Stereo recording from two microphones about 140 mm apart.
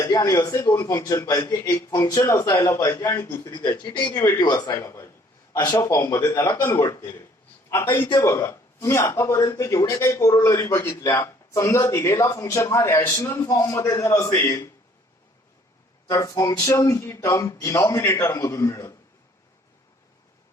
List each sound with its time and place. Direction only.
0.0 s a man's voice: 25° left (ahead or behind)
4.7 s a man's voice: 20° left (ahead or behind)
16.0 s a man's voice: 25° left (ahead or behind)